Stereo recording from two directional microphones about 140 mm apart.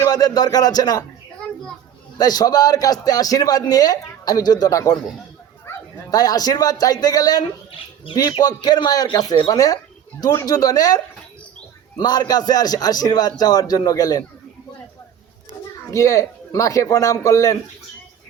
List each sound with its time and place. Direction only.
0.0 s speech: 25° left (ahead or behind)
2.1 s a man's voice: 25° left (ahead or behind)
15.9 s a man's voice: 25° left (ahead or behind)